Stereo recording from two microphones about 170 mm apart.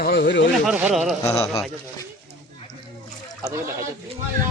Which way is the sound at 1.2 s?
20° left (ahead or behind).